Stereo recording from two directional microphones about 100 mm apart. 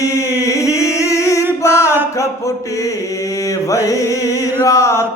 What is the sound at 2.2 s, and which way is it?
Mantra, 30° left (ahead or behind).